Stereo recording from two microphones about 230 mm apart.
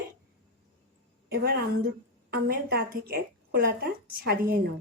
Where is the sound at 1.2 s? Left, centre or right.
Right.